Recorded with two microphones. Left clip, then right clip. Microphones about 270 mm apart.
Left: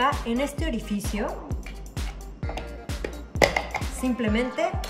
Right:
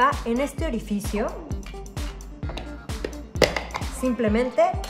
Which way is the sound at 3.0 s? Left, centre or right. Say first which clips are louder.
Even; centre.